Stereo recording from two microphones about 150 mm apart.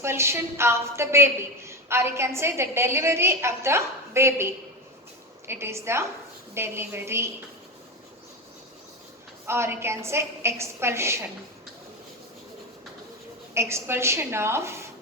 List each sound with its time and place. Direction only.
0.0 s a woman's voice: 15° right (ahead or behind)
9.5 s a woman's voice: 15° right (ahead or behind)
13.5 s a woman's voice: 15° right (ahead or behind)